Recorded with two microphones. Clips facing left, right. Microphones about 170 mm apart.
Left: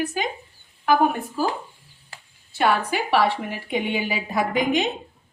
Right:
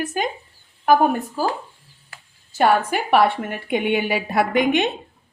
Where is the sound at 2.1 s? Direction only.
25° left (ahead or behind).